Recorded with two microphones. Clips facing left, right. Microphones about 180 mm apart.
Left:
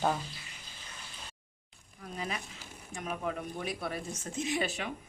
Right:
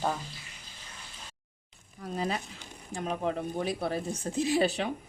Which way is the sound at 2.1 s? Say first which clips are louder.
Right 6 dB; 35° right (ahead or behind).